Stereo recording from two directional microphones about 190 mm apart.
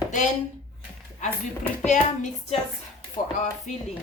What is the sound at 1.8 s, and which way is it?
Speech, 40° left (ahead or behind).